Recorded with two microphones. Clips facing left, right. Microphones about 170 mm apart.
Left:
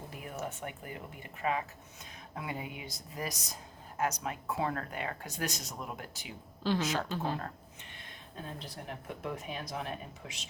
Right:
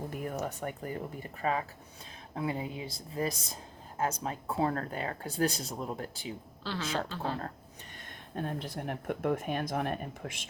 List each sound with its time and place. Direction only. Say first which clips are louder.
0.1 s a sound: right 8 dB; 45° right (ahead or behind)
0.4 s speech: right 4 dB; 40° right (ahead or behind)
6.6 s a woman's voice: left 7 dB; 15° left (ahead or behind)
8.4 s speech: right 8 dB; 55° right (ahead or behind)